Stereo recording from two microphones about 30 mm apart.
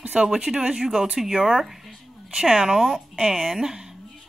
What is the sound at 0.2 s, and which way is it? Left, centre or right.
Speech, right.